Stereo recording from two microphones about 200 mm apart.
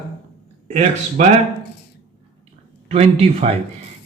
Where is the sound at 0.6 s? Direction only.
35° right (ahead or behind).